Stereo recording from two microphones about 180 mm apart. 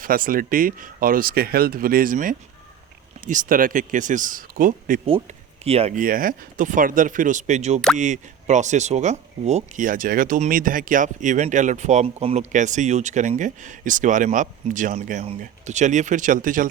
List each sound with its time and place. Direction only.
0.0 s speech: 50° right (ahead or behind)
5.6 s speech: 35° right (ahead or behind)
6.0 s speech: 50° right (ahead or behind)